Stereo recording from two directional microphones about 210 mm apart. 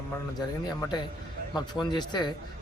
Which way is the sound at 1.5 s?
20° left (ahead or behind).